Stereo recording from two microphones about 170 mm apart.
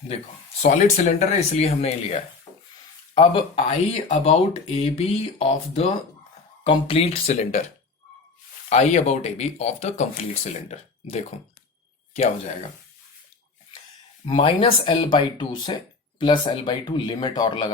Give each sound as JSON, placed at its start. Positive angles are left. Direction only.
{"t": 0.6, "sound": "speech", "side_deg": 45}
{"t": 8.7, "sound": "speech", "side_deg": 40}
{"t": 14.3, "sound": "speech", "side_deg": 30}